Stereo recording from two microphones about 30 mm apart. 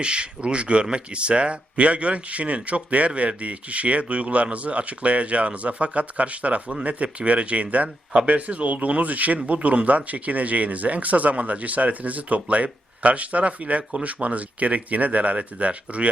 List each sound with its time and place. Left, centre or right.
0.0 s speech: right
9.5 s speech: right